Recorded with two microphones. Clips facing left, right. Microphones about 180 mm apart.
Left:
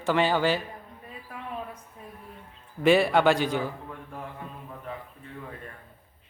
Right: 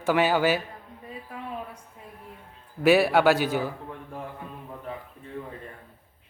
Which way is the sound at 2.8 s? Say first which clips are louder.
Right 1 dB; 5° right (ahead or behind).